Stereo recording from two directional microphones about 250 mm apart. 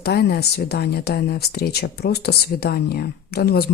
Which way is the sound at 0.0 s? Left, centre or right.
Left.